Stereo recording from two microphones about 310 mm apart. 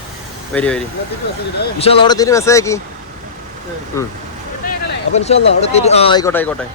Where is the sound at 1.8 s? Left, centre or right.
Centre.